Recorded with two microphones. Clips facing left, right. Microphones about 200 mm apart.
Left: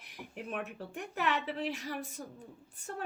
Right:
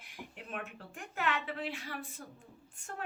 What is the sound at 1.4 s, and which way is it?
Speech, 40° left (ahead or behind).